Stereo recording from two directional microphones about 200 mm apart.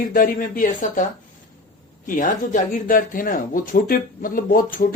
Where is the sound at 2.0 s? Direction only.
40° left (ahead or behind).